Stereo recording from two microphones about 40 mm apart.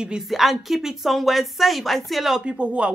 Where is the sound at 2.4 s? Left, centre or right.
Right.